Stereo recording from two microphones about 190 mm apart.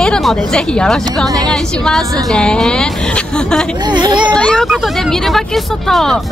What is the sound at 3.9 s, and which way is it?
Speech, 25° right (ahead or behind).